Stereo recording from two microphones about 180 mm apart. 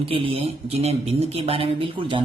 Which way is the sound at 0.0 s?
30° right (ahead or behind).